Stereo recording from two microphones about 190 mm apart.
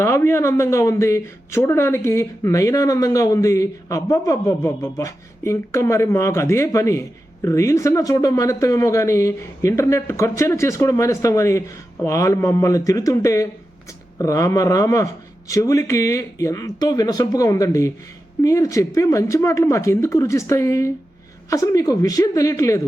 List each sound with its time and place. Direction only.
0.0 s speech: 15° left (ahead or behind)